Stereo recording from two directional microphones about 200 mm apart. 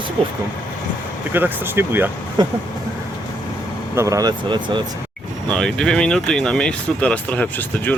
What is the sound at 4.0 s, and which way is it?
Speech, 15° right (ahead or behind).